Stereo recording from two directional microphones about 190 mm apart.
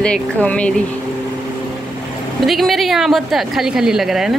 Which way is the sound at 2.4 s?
Centre (ahead or behind).